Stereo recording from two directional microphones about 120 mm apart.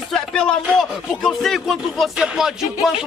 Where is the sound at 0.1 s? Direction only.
5° left (ahead or behind).